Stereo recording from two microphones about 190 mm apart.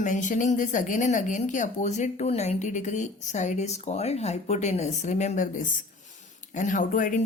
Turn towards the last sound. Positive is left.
turn(degrees=45)  # may be behind; listen again after turning